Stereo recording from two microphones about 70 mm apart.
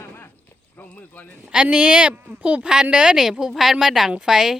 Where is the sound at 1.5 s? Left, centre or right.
Centre.